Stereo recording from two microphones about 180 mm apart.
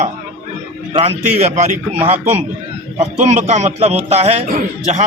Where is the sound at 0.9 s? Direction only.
35° right (ahead or behind).